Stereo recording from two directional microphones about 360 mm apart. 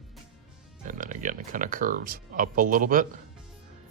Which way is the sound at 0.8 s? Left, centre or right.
Right.